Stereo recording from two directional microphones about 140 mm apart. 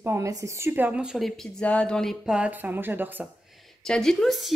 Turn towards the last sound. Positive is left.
turn(degrees=0)  # may be behind; listen again after turning